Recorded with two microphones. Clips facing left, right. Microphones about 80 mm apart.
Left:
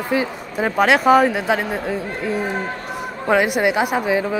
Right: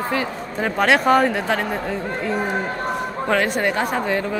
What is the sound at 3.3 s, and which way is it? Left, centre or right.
Speech, centre.